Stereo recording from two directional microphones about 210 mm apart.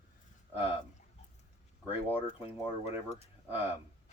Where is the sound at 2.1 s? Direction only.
10° right (ahead or behind).